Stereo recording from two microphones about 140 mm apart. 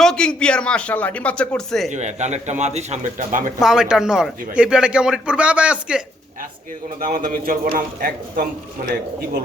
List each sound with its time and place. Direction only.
0.0 s speech: 5° left (ahead or behind)
1.9 s a man's voice: 55° right (ahead or behind)
3.6 s a man's voice: 5° right (ahead or behind)
7.0 s a man's voice: 75° right (ahead or behind); by 8.4 s 90° right